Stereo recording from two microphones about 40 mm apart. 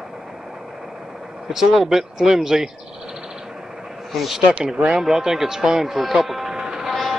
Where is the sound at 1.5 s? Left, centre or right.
Centre.